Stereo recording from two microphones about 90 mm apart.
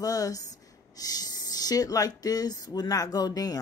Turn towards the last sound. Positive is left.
turn(degrees=45)  # may be behind; listen again after turning